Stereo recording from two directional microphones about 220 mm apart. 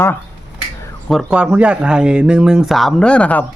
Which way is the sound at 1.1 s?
Centre (ahead or behind).